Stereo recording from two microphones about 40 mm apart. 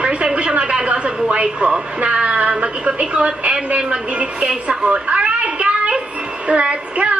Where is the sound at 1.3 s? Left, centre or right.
Right.